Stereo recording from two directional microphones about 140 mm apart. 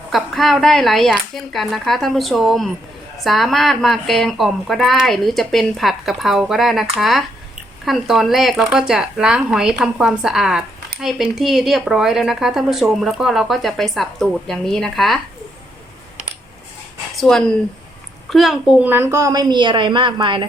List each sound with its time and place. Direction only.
0.1 s speech: centre (ahead or behind)
17.2 s speech: 5° left (ahead or behind)
18.9 s a woman's voice: 15° right (ahead or behind); by 20.5 s 35° right (ahead or behind)